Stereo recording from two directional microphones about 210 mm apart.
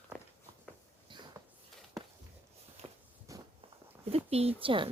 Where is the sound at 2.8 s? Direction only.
25° right (ahead or behind).